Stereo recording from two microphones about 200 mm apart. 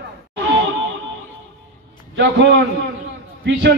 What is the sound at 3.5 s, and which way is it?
Speech, 60° right (ahead or behind).